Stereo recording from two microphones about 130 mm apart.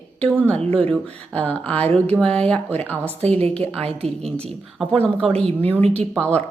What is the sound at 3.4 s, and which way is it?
Speech, 50° right (ahead or behind).